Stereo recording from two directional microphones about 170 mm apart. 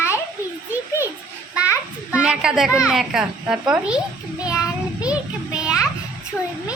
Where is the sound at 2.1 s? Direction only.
5° right (ahead or behind).